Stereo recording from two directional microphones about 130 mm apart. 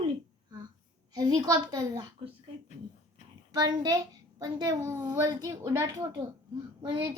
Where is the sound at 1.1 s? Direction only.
35° right (ahead or behind).